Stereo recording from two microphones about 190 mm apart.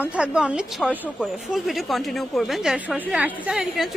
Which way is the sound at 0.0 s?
5° right (ahead or behind).